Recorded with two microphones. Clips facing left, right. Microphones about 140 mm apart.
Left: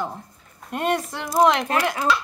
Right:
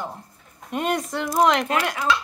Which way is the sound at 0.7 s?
Centre (ahead or behind).